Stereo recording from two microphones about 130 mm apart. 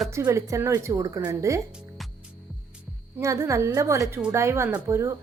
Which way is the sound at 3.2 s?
25° right (ahead or behind).